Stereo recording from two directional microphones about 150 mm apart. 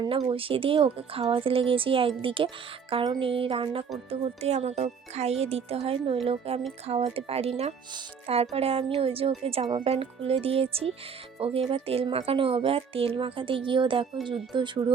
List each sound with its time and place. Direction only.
0.0 s speech: 30° right (ahead or behind)